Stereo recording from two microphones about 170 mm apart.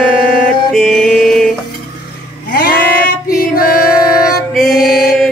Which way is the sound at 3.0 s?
60° left (ahead or behind).